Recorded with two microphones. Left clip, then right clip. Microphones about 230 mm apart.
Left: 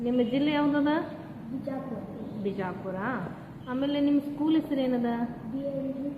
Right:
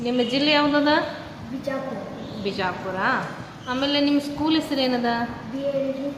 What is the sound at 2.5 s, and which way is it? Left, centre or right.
A woman's voice, centre.